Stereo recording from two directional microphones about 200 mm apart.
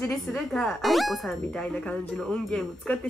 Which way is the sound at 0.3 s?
5° left (ahead or behind).